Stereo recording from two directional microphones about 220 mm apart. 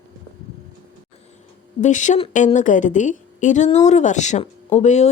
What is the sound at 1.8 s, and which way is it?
A woman's voice, 35° left (ahead or behind).